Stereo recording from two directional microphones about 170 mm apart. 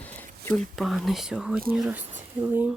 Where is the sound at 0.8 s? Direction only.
Centre (ahead or behind).